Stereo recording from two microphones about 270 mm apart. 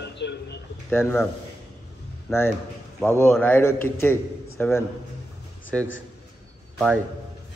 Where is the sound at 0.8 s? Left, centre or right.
Centre.